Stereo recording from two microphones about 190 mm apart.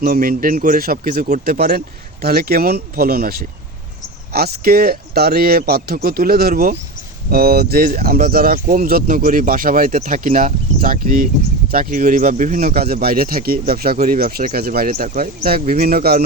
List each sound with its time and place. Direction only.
0.0 s speech: 50° right (ahead or behind)